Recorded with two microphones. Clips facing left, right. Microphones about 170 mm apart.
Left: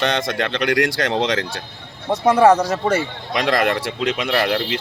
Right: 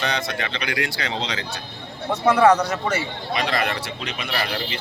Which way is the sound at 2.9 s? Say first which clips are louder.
Left 4 dB; 65° left (ahead or behind).